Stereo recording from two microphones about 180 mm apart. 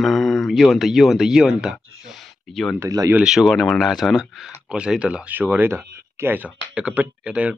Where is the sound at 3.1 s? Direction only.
5° right (ahead or behind).